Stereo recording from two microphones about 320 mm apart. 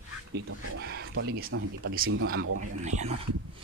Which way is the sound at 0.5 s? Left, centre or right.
Right.